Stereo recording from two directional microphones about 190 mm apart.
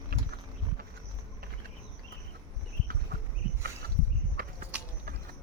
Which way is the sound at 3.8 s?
55° right (ahead or behind).